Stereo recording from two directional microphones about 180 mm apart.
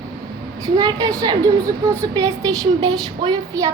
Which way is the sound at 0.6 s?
20° right (ahead or behind).